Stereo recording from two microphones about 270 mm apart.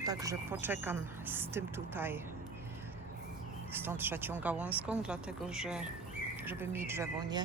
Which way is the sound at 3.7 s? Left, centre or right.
Centre.